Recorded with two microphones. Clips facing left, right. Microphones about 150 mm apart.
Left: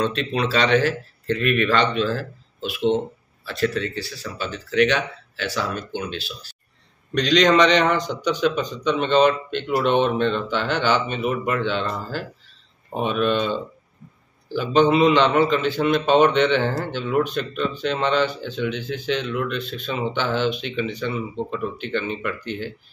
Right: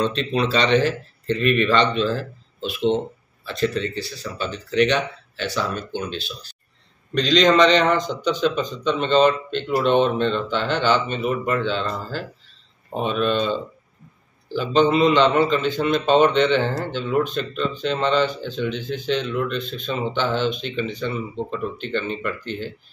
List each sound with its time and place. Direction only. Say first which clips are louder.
0.0 s speech: right 1 dB; 5° left (ahead or behind)